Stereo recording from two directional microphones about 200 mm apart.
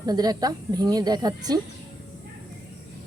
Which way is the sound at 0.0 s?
20° right (ahead or behind).